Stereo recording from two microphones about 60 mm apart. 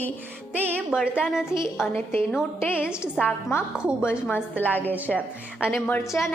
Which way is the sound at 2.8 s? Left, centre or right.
Centre.